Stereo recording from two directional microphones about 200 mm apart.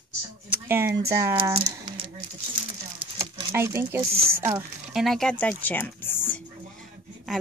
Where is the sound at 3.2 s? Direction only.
15° right (ahead or behind).